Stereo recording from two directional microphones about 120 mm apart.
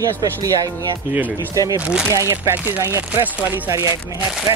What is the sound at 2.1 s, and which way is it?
Chopping, 20° right (ahead or behind).